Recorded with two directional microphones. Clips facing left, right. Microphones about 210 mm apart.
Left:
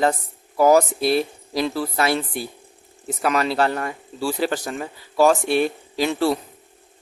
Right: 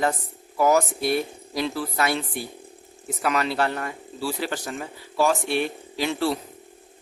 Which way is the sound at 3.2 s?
40° left (ahead or behind).